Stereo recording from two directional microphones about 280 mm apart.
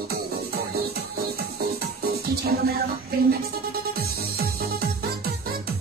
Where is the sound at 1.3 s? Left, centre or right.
Right.